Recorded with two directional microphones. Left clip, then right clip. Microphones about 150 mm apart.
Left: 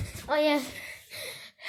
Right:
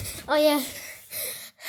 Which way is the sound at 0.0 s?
45° right (ahead or behind).